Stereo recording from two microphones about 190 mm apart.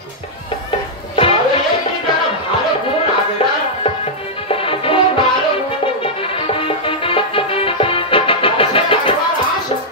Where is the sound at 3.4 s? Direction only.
30° left (ahead or behind).